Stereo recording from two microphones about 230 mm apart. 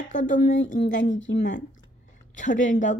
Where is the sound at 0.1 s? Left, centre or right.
Left.